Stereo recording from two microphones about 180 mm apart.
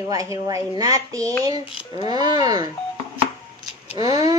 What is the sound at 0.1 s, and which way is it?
Speech, 20° right (ahead or behind).